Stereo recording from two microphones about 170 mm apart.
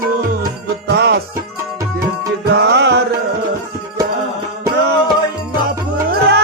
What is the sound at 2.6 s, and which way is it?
Music, 85° right.